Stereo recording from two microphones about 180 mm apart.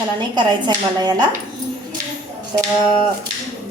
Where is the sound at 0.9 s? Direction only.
20° right (ahead or behind).